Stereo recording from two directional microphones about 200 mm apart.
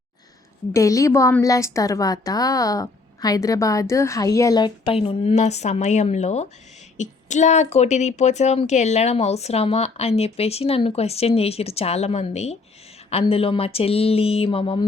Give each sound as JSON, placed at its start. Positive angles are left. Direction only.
{"t": 0.7, "sound": "a woman's voice", "side_deg": 15}